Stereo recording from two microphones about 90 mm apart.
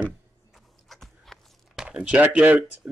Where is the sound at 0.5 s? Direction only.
5° left (ahead or behind).